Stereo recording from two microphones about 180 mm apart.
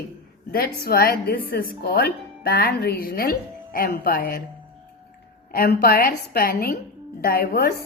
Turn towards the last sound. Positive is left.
turn(degrees=55)  # may be behind; listen again after turning